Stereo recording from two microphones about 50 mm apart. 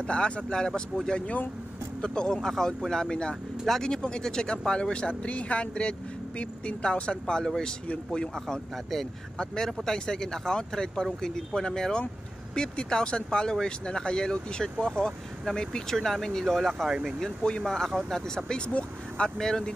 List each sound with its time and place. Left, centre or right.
0.0 s speech: left
9.8 s speech: centre
17.4 s speech: centre
18.7 s speech: left
19.3 s speech: centre